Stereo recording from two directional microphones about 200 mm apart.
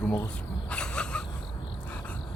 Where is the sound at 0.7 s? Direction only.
5° left (ahead or behind).